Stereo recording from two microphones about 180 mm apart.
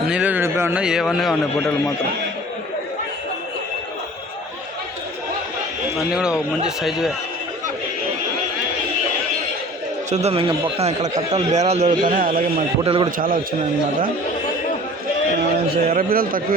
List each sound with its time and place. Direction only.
0.1 s a sound: 10° right (ahead or behind)
6.0 s a man's voice: 5° right (ahead or behind)
10.1 s a man's voice: 35° right (ahead or behind)
12.8 s a man's voice: 30° right (ahead or behind)
13.1 s a man's voice: 50° right (ahead or behind)
15.7 s a man's voice: 55° right (ahead or behind)